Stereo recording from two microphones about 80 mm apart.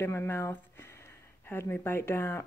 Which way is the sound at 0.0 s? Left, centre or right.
Left.